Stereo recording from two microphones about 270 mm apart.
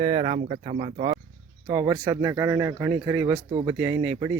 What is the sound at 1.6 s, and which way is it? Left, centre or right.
Speech, centre.